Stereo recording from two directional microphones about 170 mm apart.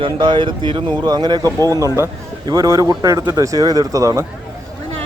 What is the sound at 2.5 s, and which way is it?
Speech, 20° right (ahead or behind).